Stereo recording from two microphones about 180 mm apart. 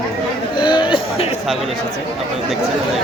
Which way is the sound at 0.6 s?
25° left (ahead or behind).